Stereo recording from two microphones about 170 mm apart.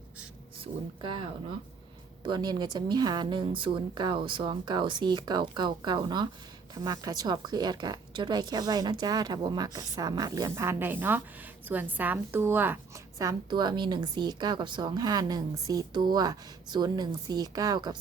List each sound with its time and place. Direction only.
0.6 s a woman's voice: 30° right (ahead or behind)